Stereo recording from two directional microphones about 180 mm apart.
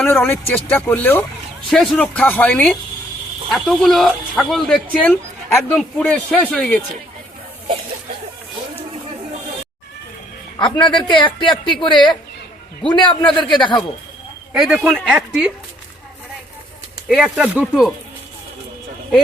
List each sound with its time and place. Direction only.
0.0 s speech: 10° left (ahead or behind)
10.6 s speech: 25° left (ahead or behind)
14.6 s speech: centre (ahead or behind)
17.1 s speech: centre (ahead or behind)